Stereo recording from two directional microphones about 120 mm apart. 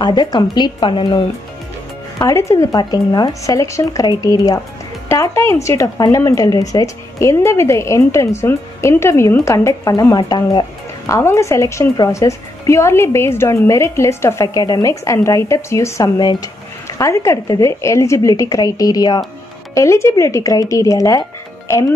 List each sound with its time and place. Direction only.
0.0 s speech: 35° left (ahead or behind)
2.1 s speech: 25° left (ahead or behind)
11.1 s speech: 25° left (ahead or behind)
16.2 s speech: 35° left (ahead or behind)
17.0 s speech: 25° left (ahead or behind)